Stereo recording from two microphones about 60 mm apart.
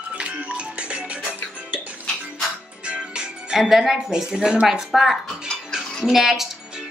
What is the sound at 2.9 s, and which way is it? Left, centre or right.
Speech, centre.